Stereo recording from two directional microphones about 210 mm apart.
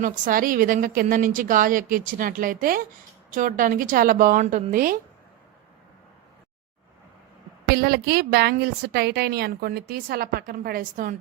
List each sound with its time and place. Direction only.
0.0 s a woman's voice: 40° right (ahead or behind)
7.7 s a woman's voice: 45° right (ahead or behind)